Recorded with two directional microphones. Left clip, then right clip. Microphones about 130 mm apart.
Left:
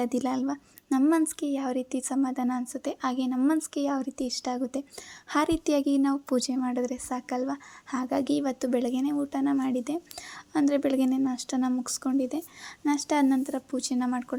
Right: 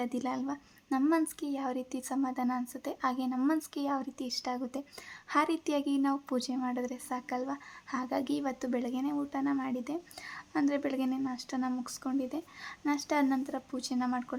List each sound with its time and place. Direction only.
0.0 s a woman's voice: 35° left (ahead or behind)